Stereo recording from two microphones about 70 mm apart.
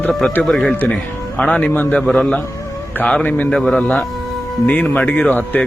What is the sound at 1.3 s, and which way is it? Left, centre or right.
Speech, left.